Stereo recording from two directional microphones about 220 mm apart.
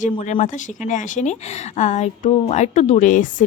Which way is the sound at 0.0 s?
30° left (ahead or behind).